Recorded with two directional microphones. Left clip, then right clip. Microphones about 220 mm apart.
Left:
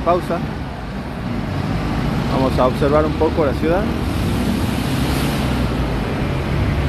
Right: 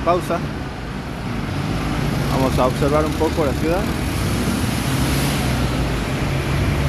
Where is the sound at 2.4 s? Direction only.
5° right (ahead or behind).